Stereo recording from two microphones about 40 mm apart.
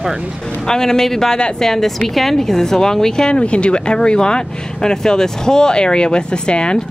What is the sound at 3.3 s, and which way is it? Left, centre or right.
Speech, left.